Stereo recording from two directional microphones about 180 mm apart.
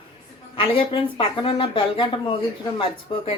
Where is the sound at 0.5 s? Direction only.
30° left (ahead or behind).